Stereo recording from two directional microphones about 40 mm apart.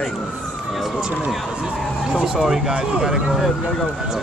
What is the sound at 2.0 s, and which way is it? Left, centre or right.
Speech, centre.